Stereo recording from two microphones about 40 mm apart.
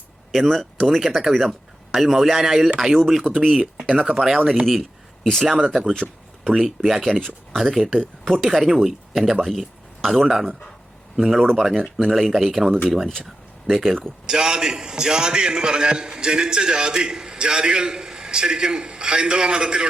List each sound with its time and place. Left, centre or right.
0.3 s speech: centre
1.3 s speech: centre
2.4 s speech: centre
3.5 s speech: right
4.1 s speech: centre
4.6 s speech: centre
5.5 s speech: centre
5.9 s a sound: centre
6.5 s speech: centre
7.1 s speech: centre
7.5 s speech: centre
8.2 s speech: centre
8.4 s speech: centre
14.3 s a man's voice: centre